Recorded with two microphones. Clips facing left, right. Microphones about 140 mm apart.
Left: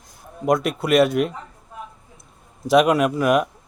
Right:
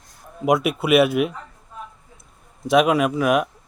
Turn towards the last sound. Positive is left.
turn(degrees=0)  # may be behind; listen again after turning